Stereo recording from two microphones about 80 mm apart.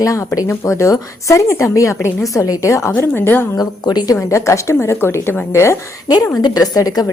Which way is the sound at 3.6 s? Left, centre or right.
Left.